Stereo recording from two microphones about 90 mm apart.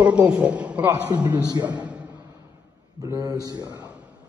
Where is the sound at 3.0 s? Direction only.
40° right (ahead or behind).